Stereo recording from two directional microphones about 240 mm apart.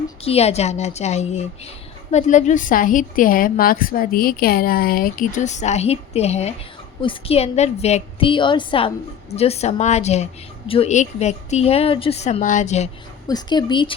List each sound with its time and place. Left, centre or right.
0.3 s a woman's voice: left
13.2 s speech: centre